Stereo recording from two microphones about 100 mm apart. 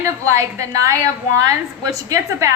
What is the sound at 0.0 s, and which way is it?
Speech, 30° right (ahead or behind).